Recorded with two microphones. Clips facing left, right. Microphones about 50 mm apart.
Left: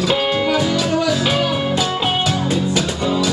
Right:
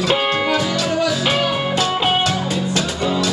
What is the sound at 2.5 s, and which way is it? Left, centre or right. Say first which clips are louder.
Music: left 2 dB; centre.